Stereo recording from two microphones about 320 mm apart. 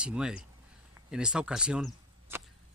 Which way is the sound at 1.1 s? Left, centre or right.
Centre.